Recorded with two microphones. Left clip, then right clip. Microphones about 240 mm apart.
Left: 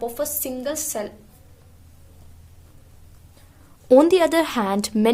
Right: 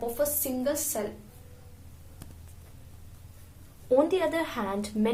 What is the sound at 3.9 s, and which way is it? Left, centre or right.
A woman's voice, left.